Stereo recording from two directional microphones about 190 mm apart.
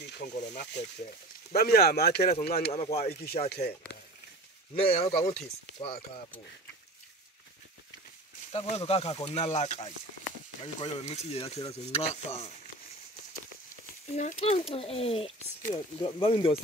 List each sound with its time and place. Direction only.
0.0 s speech: 60° left (ahead or behind)
2.7 s speech: 35° left (ahead or behind)
3.4 s speech: 55° left (ahead or behind)
4.7 s speech: 30° left (ahead or behind)
8.5 s speech: 30° left (ahead or behind)
14.1 s speech: 35° left (ahead or behind)